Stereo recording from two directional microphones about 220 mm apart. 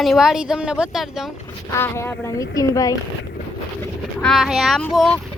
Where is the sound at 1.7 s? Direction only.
10° left (ahead or behind).